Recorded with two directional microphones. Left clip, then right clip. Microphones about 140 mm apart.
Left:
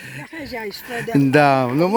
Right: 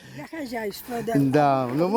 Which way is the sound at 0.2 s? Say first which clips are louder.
Right 1 dB; 5° right (ahead or behind).